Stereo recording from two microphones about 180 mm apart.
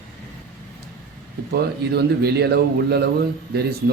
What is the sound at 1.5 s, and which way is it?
A man's voice, 65° right (ahead or behind).